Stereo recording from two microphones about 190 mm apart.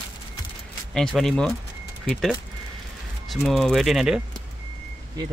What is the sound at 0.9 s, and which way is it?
Speech, centre (ahead or behind).